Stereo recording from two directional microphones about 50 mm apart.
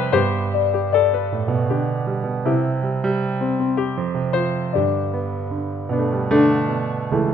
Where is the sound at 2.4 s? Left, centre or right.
Centre.